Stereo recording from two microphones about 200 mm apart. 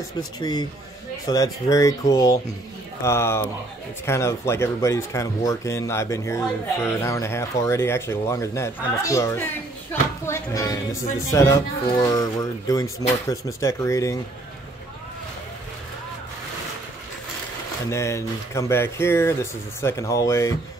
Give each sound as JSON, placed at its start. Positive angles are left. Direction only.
{"t": 0.4, "sound": "speech", "side_deg": 20}
{"t": 17.8, "sound": "speech", "side_deg": 15}